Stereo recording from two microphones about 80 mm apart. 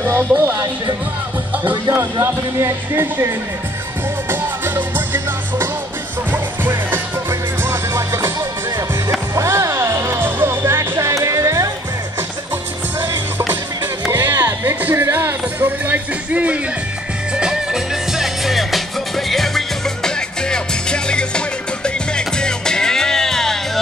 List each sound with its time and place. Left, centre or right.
0.4 s music: right
1.6 s speech: right
4.3 s music: right
9.3 s music: right
14.1 s a sound: right
15.1 s music: right
17.4 s music: centre